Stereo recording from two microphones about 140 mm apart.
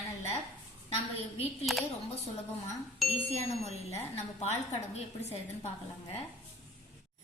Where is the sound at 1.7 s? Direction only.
Centre (ahead or behind).